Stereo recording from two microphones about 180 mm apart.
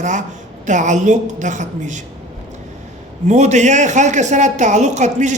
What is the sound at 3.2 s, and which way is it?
A woman's voice, 40° right (ahead or behind).